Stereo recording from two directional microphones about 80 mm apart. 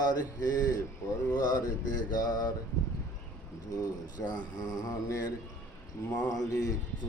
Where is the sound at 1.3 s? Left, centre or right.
Left.